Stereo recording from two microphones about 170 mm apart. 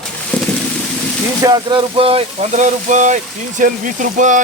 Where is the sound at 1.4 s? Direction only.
25° right (ahead or behind); by 4.4 s 50° right (ahead or behind).